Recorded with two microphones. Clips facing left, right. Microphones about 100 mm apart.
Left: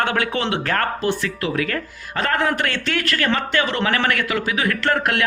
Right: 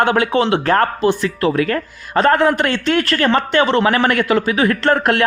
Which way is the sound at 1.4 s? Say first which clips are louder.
Right 6 dB; 35° right (ahead or behind).